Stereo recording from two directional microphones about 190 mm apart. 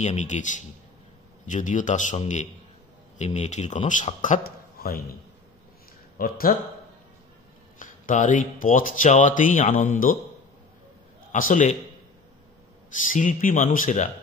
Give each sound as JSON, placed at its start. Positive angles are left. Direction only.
{"t": 0.0, "sound": "speech", "side_deg": 40}
{"t": 4.7, "sound": "a sound", "side_deg": 50}
{"t": 6.1, "sound": "a man's voice", "side_deg": 50}
{"t": 7.8, "sound": "speech", "side_deg": 45}
{"t": 11.3, "sound": "speech", "side_deg": 45}
{"t": 13.0, "sound": "speech", "side_deg": 45}